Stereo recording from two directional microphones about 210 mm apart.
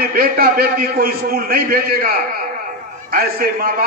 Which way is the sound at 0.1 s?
45° right (ahead or behind).